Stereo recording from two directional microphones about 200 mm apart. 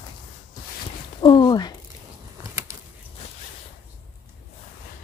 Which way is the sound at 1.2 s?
20° left (ahead or behind).